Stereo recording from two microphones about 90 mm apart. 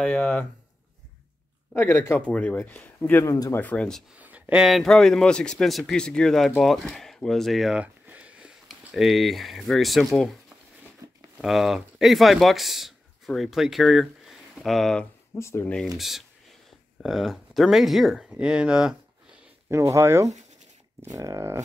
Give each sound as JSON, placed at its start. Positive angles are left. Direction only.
{"t": 0.0, "sound": "speech", "side_deg": 15}
{"t": 1.7, "sound": "speech", "side_deg": 25}
{"t": 2.2, "sound": "speech", "side_deg": 15}
{"t": 3.5, "sound": "speech", "side_deg": 15}
{"t": 4.1, "sound": "a sound", "side_deg": -15}
{"t": 4.6, "sound": "speech", "side_deg": 0}
{"t": 7.7, "sound": "a sound", "side_deg": -15}
{"t": 8.6, "sound": "speech", "side_deg": 0}
{"t": 11.4, "sound": "speech", "side_deg": -5}
{"t": 15.3, "sound": "speech", "side_deg": 30}
{"t": 16.0, "sound": "speech", "side_deg": 0}
{"t": 19.7, "sound": "speech", "side_deg": -35}